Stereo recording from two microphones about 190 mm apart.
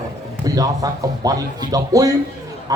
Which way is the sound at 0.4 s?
20° right (ahead or behind).